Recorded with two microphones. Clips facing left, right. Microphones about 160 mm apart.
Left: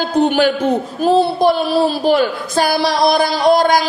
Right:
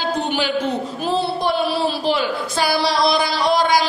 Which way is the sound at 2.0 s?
45° left (ahead or behind).